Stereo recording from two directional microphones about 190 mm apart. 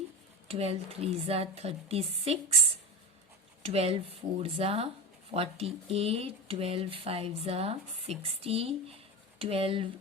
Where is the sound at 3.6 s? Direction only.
30° right (ahead or behind).